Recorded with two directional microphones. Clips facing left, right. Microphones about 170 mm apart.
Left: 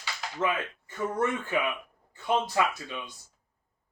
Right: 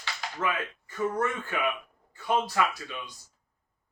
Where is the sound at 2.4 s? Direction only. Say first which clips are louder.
Left 1 dB; 25° left (ahead or behind).